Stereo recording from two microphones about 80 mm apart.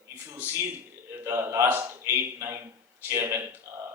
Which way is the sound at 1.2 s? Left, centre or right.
Right.